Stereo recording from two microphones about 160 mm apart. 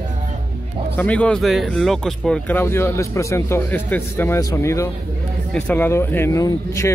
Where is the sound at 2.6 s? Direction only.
15° left (ahead or behind).